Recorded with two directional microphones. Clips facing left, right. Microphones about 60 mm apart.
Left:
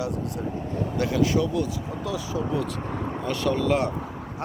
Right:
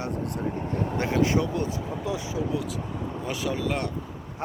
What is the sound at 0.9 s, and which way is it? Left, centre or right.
Speech, right.